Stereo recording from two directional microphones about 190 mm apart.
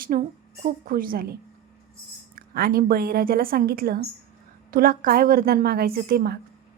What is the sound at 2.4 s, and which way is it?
Speech, 50° right (ahead or behind).